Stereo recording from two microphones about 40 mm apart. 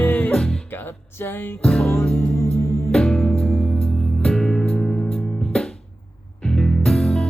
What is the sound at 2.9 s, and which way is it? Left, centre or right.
Music, centre.